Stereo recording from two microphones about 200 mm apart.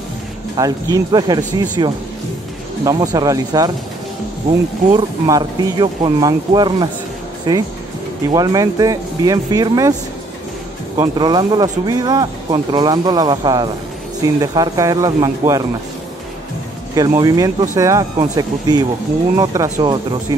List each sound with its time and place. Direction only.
0.6 s speech: 20° right (ahead or behind)
11.0 s speech: 20° right (ahead or behind)
16.9 s speech: 20° right (ahead or behind)